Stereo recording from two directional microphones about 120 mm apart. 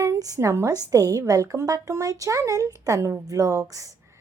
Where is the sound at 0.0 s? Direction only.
25° right (ahead or behind).